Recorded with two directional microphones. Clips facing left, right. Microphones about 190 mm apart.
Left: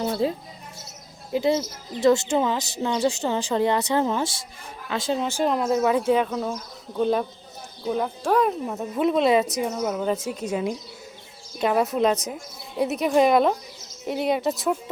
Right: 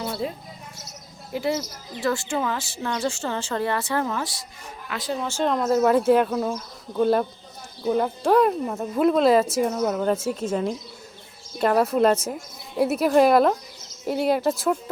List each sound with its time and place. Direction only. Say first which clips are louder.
0.1 s speech: left 5 dB; 30° left (ahead or behind); by 14.5 s centre (ahead or behind)